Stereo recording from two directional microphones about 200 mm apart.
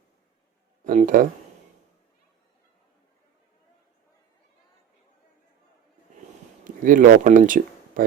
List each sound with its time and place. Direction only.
0.9 s speech: 40° right (ahead or behind)
6.7 s speech: 40° right (ahead or behind)